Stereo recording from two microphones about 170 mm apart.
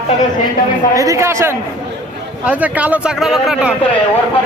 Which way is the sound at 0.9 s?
20° right (ahead or behind).